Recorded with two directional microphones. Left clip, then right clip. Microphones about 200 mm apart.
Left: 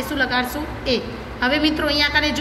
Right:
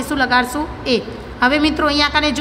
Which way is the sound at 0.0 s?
45° right (ahead or behind).